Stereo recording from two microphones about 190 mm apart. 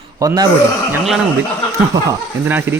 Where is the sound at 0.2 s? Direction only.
20° right (ahead or behind).